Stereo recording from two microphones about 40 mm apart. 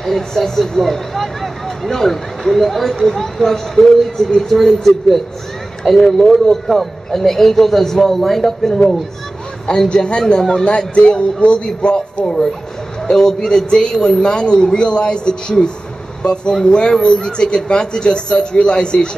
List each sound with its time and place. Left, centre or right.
0.0 s a man's voice: centre
3.7 s a man's voice: centre
9.8 s a man's voice: left
13.0 s a man's voice: centre